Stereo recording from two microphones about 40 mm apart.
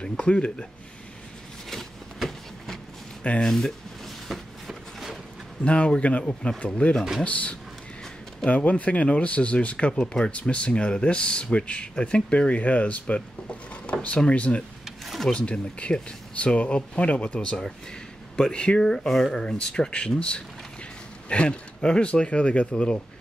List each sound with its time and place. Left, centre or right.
0.2 s speech: left
1.7 s a sound: centre
3.4 s speech: centre
4.3 s a sound: centre
5.6 s speech: left
9.9 s speech: centre
10.5 s speech: left
14.9 s a sound: centre
15.3 s speech: left
18.9 s speech: centre
19.4 s speech: left